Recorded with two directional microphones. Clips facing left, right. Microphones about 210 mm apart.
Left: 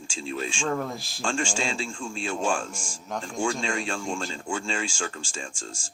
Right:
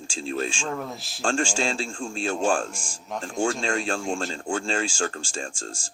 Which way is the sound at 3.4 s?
40° right (ahead or behind).